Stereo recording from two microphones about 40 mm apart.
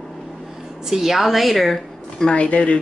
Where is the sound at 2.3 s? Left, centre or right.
Left.